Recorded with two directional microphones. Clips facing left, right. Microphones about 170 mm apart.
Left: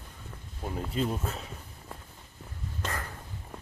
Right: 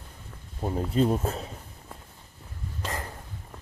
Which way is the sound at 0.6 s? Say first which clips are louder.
Right 7 dB; 40° right (ahead or behind).